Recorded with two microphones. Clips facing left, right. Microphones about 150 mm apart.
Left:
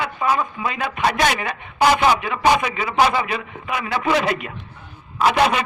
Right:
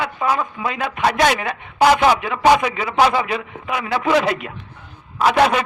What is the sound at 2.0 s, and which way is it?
Speech, 65° right (ahead or behind).